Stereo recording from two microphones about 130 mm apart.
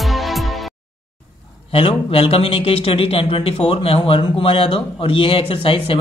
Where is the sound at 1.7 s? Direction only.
45° left (ahead or behind).